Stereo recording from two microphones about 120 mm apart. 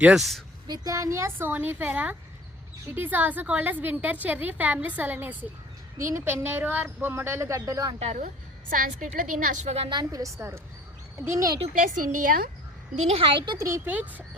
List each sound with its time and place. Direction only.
0.0 s a woman's voice: 5° right (ahead or behind)
0.7 s a woman's voice: 30° right (ahead or behind)
7.9 s a woman's voice: 65° right (ahead or behind)
9.0 s a woman's voice: 90° right; by 9.9 s 65° right (ahead or behind)
9.9 s speech: 35° right (ahead or behind)
11.7 s a woman's voice: 90° right
13.0 s a woman's voice: 55° right (ahead or behind); by 13.6 s 40° right (ahead or behind)
13.6 s speech: 25° right (ahead or behind)